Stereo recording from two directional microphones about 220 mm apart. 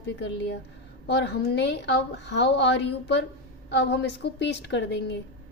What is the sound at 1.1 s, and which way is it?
A woman's voice, 50° left (ahead or behind).